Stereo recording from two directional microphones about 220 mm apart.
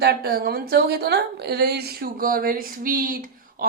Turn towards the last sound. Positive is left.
turn(degrees=-40)  # may be behind; listen again after turning